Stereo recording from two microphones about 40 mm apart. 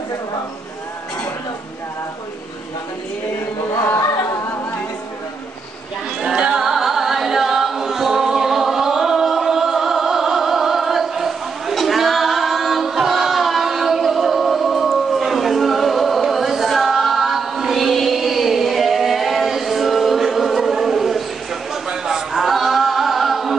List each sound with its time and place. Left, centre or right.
6.2 s music: centre
6.6 s music: centre
21.8 s singing: centre